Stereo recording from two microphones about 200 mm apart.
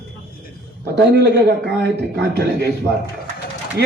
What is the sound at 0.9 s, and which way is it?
A man's voice, 55° right (ahead or behind).